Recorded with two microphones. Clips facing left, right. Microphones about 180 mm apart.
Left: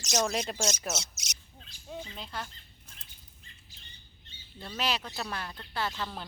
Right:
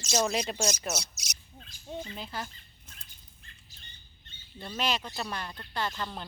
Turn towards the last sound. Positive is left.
turn(degrees=5)  # may be behind; listen again after turning